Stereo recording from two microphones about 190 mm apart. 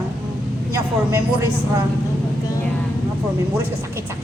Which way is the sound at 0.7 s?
15° right (ahead or behind).